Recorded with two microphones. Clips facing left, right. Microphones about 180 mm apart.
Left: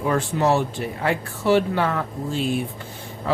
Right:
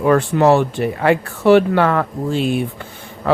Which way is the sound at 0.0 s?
70° right (ahead or behind).